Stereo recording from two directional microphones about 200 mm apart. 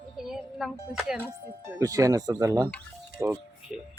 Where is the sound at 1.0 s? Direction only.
5° right (ahead or behind).